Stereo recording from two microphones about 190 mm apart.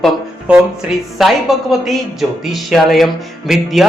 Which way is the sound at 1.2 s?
Centre (ahead or behind).